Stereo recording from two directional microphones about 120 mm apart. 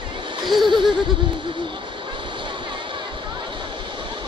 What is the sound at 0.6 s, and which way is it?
Neigh, 40° right (ahead or behind).